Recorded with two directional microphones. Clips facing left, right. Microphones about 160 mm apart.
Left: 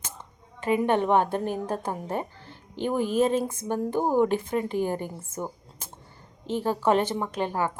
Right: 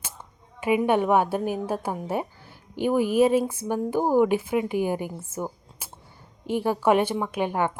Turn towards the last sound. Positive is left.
turn(degrees=-15)  # may be behind; listen again after turning